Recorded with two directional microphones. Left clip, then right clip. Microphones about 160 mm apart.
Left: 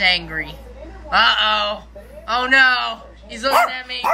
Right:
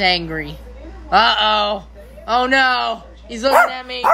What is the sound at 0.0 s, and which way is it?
A man's voice, 30° right (ahead or behind).